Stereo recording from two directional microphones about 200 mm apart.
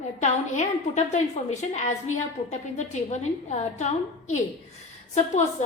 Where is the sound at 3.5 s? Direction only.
35° left (ahead or behind).